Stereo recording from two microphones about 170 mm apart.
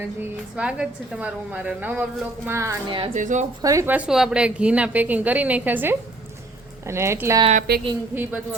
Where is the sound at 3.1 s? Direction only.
45° right (ahead or behind).